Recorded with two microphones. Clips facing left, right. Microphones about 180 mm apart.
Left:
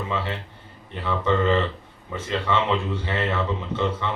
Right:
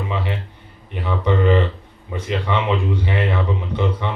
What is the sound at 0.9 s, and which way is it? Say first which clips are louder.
A man's voice: right 2 dB; 15° right (ahead or behind).